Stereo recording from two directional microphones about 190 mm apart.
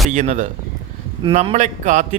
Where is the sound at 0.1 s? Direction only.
40° right (ahead or behind).